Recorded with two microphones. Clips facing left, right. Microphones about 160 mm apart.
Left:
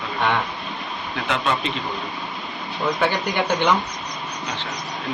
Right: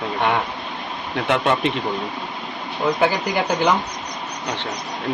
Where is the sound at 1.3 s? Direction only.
60° right (ahead or behind).